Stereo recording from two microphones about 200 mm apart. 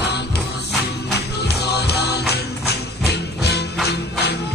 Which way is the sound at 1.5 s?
55° left (ahead or behind).